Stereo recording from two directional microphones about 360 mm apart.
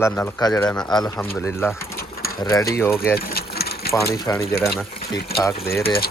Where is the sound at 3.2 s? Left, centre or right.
Left.